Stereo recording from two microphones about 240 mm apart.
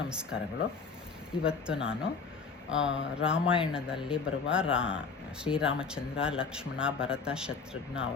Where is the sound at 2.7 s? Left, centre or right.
Left.